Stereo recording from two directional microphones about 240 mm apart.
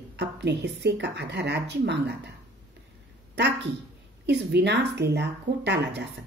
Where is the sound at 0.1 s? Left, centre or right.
Right.